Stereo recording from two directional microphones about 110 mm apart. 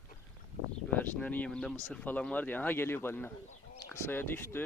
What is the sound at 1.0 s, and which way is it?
Speech, 15° left (ahead or behind).